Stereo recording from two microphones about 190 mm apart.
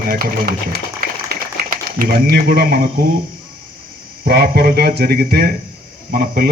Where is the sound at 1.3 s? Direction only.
50° right (ahead or behind).